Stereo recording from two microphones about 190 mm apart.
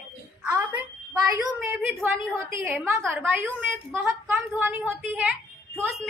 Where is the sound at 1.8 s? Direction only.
Centre (ahead or behind).